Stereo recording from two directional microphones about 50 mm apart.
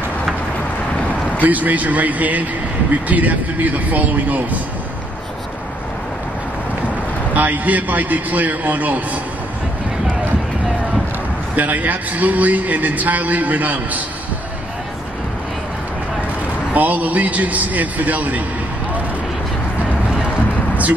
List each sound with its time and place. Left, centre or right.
1.4 s a man's voice: right
7.3 s a man's voice: right
11.5 s a man's voice: right
16.7 s a man's voice: right